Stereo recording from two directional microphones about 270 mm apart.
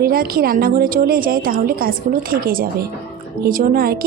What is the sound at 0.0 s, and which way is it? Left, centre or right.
A woman's voice, right.